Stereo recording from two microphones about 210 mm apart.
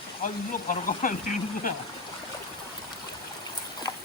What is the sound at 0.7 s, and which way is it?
Speech, 40° left (ahead or behind).